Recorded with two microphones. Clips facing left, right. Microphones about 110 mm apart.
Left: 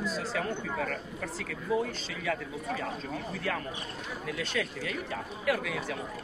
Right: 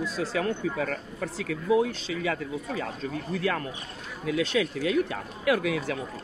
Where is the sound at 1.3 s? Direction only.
85° right.